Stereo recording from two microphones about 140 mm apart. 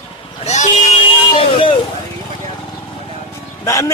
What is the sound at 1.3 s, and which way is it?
Speech, 40° left (ahead or behind).